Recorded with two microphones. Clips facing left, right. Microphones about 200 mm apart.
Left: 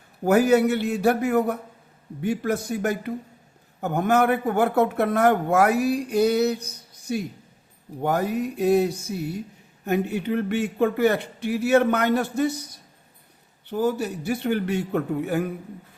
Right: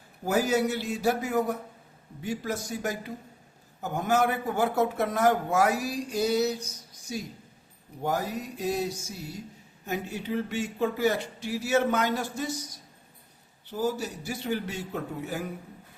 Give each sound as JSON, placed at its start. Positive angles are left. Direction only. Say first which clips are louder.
{"t": 0.3, "sound": "a man's voice", "louder": "left 7 dB", "side_deg": 60}